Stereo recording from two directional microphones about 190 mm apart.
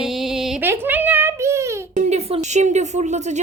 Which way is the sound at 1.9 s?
35° right (ahead or behind).